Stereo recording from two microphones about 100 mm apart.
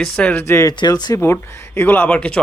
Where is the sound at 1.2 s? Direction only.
25° left (ahead or behind).